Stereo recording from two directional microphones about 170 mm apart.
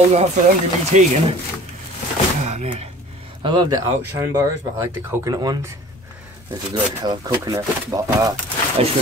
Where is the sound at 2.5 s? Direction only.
40° right (ahead or behind).